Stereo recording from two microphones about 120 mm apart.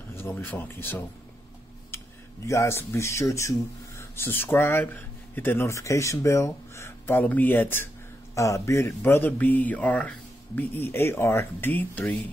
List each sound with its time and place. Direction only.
0.1 s speech: 20° left (ahead or behind)
2.4 s speech: 25° left (ahead or behind)